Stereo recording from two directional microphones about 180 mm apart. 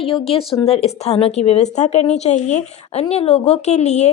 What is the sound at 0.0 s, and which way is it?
A woman's voice, 30° left (ahead or behind).